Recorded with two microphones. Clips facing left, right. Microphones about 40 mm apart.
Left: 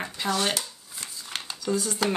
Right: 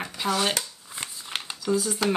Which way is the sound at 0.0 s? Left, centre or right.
Centre.